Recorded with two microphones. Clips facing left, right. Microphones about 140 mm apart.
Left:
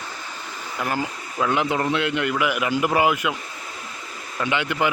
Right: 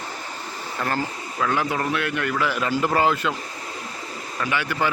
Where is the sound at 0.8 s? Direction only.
15° left (ahead or behind).